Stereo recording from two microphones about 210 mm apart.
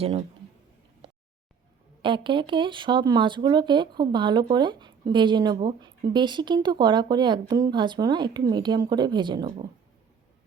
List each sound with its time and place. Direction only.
2.0 s speech: 25° right (ahead or behind)